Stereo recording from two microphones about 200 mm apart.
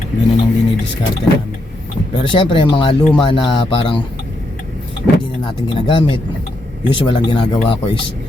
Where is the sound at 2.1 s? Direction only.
25° left (ahead or behind).